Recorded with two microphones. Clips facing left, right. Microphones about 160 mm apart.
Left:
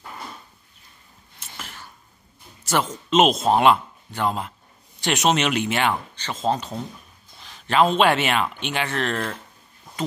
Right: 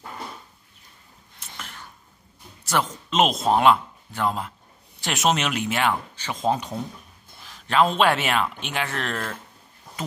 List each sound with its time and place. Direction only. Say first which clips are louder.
1.4 s a sound: left 1 dB; centre (ahead or behind)
3.1 s speech: left 3 dB; centre (ahead or behind)
6.2 s speech: even; 10° right (ahead or behind)
7.4 s speech: left 2 dB; centre (ahead or behind)